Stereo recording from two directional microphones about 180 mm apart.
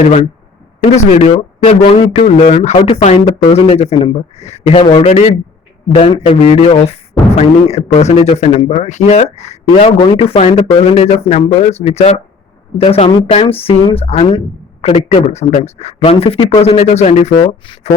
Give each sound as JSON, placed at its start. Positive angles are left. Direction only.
{"t": 0.9, "sound": "speech", "side_deg": 35}
{"t": 11.6, "sound": "speech", "side_deg": 35}